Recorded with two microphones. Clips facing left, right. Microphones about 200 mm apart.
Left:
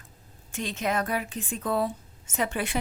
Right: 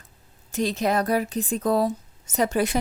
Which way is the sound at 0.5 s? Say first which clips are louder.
Right 6 dB; 35° right (ahead or behind).